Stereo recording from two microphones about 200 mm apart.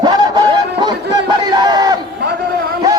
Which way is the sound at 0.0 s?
20° right (ahead or behind).